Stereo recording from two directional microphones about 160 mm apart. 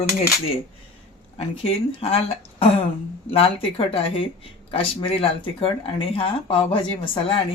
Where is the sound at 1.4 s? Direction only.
35° left (ahead or behind).